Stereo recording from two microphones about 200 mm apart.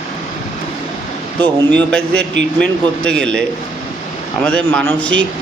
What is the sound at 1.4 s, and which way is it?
A man's voice, 5° left (ahead or behind).